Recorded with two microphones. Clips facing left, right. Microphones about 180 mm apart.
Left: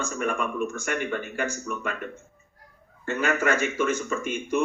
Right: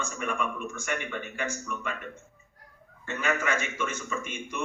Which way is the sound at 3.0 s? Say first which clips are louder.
Left 5 dB; 45° left (ahead or behind).